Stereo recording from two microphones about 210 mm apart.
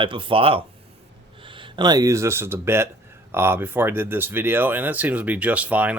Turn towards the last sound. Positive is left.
turn(degrees=-5)  # may be behind; listen again after turning